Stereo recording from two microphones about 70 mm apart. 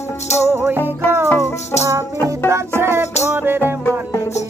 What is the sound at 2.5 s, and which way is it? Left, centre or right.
Music, right.